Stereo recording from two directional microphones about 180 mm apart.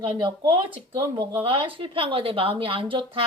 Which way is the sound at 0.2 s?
30° right (ahead or behind).